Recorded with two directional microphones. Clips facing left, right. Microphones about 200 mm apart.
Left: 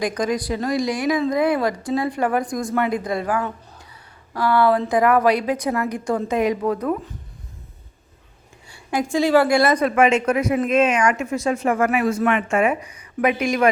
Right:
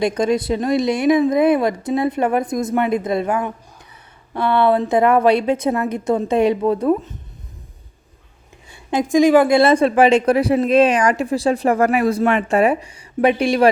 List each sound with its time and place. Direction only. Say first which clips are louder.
0.0 s a woman's voice: right 5 dB; 25° right (ahead or behind)
8.7 s a woman's voice: right 5 dB; 20° right (ahead or behind)